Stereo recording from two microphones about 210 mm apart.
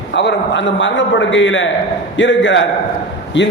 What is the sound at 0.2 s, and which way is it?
A man's voice, 55° left (ahead or behind).